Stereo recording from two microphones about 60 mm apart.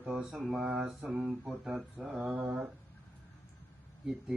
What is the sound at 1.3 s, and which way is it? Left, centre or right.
Speech, centre.